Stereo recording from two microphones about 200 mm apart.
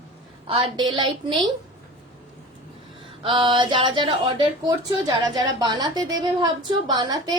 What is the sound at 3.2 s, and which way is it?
A woman's voice, 25° right (ahead or behind).